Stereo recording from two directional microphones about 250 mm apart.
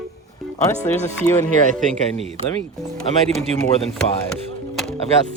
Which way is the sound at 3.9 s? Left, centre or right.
Centre.